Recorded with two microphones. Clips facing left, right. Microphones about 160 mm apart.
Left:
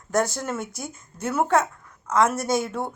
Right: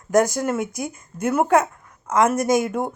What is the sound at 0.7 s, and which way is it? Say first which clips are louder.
Speech: right 7 dB; 55° right (ahead or behind).